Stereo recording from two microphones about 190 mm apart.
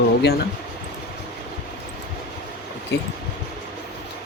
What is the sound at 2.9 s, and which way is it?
Speech, 65° left (ahead or behind).